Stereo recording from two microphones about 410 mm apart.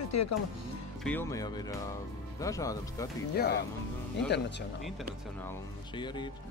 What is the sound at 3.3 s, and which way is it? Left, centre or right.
Speech, left.